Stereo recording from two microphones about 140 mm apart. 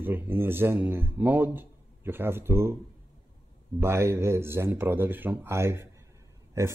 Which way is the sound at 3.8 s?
20° right (ahead or behind).